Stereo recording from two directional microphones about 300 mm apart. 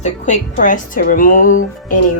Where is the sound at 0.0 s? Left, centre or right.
Left.